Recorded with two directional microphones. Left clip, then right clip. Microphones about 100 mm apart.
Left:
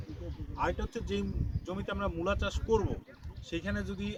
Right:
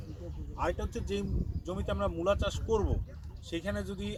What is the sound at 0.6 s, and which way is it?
Speech, 20° left (ahead or behind).